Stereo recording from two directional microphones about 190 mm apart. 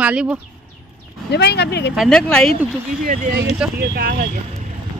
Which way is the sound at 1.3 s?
60° left (ahead or behind).